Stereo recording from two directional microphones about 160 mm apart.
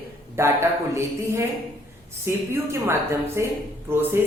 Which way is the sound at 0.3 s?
15° right (ahead or behind).